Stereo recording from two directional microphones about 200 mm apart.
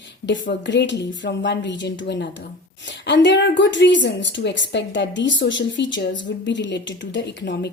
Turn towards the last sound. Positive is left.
turn(degrees=60)  # may be behind; listen again after turning